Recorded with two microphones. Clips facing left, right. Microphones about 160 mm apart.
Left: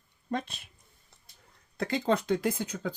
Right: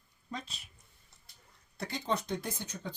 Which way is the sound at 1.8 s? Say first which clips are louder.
Left 7 dB; 90° left.